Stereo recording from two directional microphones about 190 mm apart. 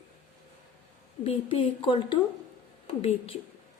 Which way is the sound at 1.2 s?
30° left (ahead or behind).